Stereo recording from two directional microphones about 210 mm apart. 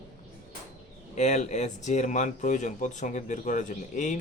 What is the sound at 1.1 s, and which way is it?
Speech, 35° left (ahead or behind).